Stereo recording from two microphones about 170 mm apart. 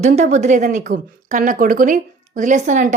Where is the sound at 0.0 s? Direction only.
40° right (ahead or behind).